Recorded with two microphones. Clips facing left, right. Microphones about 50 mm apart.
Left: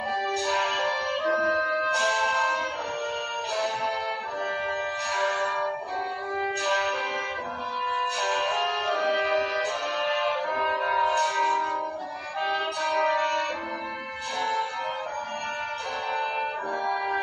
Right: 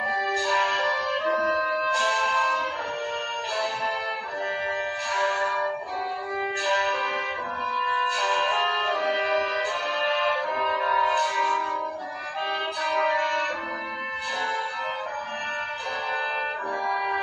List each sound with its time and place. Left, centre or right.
0.3 s music: right
1.3 s music: centre
2.0 s music: right
5.1 s music: centre
6.6 s music: right
7.9 s music: centre
10.0 s music: right
11.1 s music: centre
12.4 s music: centre